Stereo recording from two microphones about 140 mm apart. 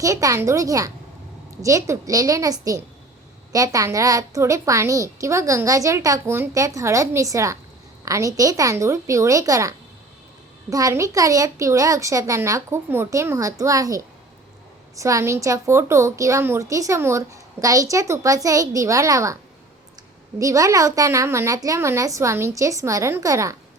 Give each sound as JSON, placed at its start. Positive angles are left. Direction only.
{"t": 0.0, "sound": "a woman's voice", "side_deg": -25}
{"t": 20.4, "sound": "a woman's voice", "side_deg": -25}